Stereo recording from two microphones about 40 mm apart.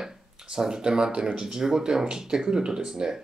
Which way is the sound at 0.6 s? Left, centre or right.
Centre.